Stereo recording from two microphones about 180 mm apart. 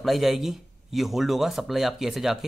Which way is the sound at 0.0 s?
Centre (ahead or behind).